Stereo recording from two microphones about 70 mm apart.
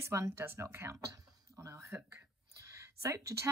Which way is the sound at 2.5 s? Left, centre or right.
Right.